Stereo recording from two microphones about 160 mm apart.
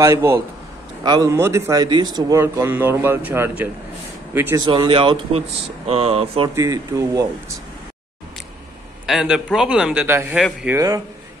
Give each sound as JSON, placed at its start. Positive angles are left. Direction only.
{"t": 0.0, "sound": "speech", "side_deg": -20}
{"t": 4.6, "sound": "speech", "side_deg": -30}
{"t": 6.5, "sound": "speech", "side_deg": -20}
{"t": 9.0, "sound": "a man's voice", "side_deg": -5}
{"t": 10.7, "sound": "speech", "side_deg": -20}